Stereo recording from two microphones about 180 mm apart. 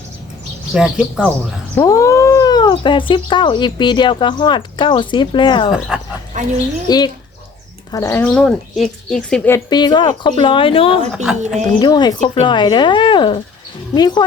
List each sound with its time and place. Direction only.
0.7 s speech: 5° right (ahead or behind)
1.7 s speech: 15° left (ahead or behind)
6.3 s speech: 45° right (ahead or behind)
6.8 s speech: 25° left (ahead or behind)
8.2 s speech: 5° left (ahead or behind)
9.5 s speech: 25° left (ahead or behind)
11.1 s speech: 5° right (ahead or behind)
11.4 s a woman's voice: 40° right (ahead or behind)
11.8 s speech: 25° left (ahead or behind)